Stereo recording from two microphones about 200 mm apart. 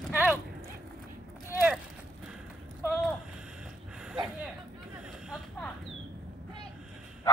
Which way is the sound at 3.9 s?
5° right (ahead or behind).